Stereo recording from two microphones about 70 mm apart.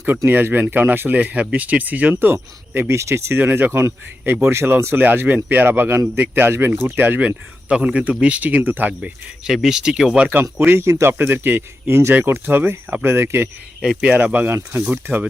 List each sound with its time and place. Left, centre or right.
0.3 s speech: right
7.2 s speech: centre
9.0 s speech: centre
10.2 s speech: right
10.7 s speech: right
14.0 s speech: right